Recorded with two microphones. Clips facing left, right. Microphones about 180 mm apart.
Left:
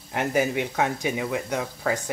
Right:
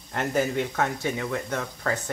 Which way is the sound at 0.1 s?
10° left (ahead or behind).